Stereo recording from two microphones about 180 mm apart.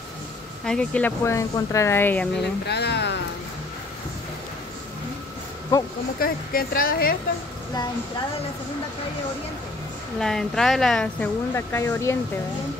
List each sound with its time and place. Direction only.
0.7 s speech: 5° left (ahead or behind)
2.6 s speech: 70° left (ahead or behind)
6.1 s a woman's voice: 55° left (ahead or behind)
10.1 s speech: 5° left (ahead or behind)